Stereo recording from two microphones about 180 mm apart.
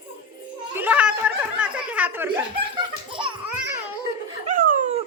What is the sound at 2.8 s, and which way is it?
Baby laughter, 30° right (ahead or behind).